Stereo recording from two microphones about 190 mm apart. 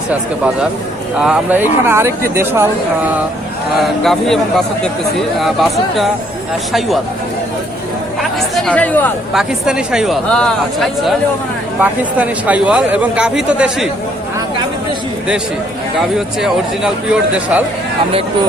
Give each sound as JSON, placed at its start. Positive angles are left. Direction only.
{"t": 0.1, "sound": "speech", "side_deg": -5}
{"t": 3.8, "sound": "speech", "side_deg": 0}
{"t": 8.2, "sound": "chatter", "side_deg": 0}
{"t": 9.3, "sound": "speech", "side_deg": -5}
{"t": 16.1, "sound": "speech", "side_deg": -5}